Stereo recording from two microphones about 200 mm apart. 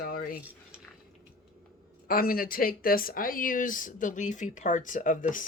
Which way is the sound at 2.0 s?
45° left (ahead or behind).